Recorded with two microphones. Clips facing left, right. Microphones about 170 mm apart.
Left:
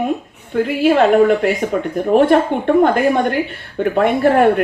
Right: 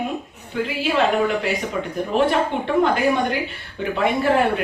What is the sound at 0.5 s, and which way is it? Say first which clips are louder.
A woman's voice: left 8 dB; 50° left (ahead or behind).